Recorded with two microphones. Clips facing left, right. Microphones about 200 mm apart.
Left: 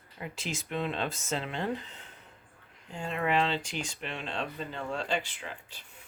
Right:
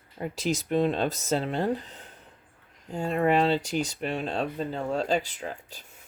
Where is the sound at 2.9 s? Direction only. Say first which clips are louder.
Right 6 dB; 40° right (ahead or behind).